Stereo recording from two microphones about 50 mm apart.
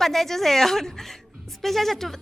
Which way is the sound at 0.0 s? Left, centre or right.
Centre.